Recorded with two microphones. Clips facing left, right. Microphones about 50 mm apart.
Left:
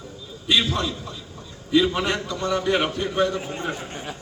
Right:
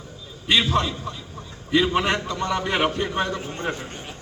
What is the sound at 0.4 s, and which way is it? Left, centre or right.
A man's voice, right.